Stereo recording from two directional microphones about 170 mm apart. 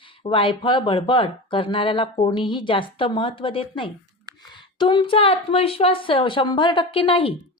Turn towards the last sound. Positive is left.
turn(degrees=30)  # may be behind; listen again after turning